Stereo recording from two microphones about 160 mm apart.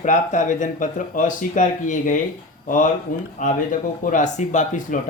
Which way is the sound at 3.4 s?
55° left (ahead or behind).